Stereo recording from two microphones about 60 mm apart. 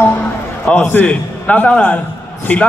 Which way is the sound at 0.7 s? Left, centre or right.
Left.